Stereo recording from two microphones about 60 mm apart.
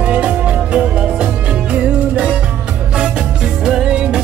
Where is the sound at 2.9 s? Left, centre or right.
Centre.